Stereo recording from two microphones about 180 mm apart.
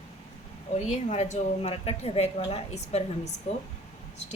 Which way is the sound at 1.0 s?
40° left (ahead or behind).